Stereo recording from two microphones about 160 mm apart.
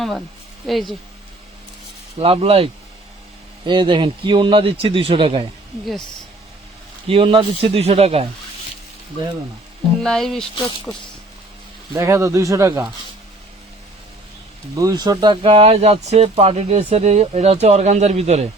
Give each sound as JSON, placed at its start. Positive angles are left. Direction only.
{"t": 0.7, "sound": "speech", "side_deg": 0}
{"t": 2.1, "sound": "speech", "side_deg": -40}
{"t": 3.7, "sound": "speech", "side_deg": -30}
{"t": 7.1, "sound": "speech", "side_deg": -35}
{"t": 10.0, "sound": "speech", "side_deg": 5}
{"t": 11.9, "sound": "speech", "side_deg": -15}
{"t": 14.8, "sound": "speech", "side_deg": -25}